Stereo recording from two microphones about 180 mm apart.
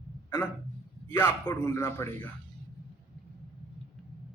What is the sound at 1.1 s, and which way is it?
A man's voice, 15° left (ahead or behind).